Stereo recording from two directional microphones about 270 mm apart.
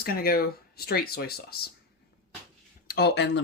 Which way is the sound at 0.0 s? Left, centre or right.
Left.